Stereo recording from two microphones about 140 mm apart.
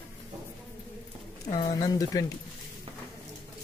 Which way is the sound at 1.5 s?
30° left (ahead or behind).